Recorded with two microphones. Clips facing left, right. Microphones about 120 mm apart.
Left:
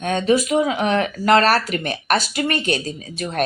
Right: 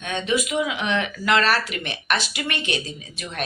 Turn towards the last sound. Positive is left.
turn(degrees=40)  # may be behind; listen again after turning